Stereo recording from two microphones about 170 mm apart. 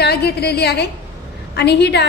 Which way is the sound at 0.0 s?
70° left (ahead or behind).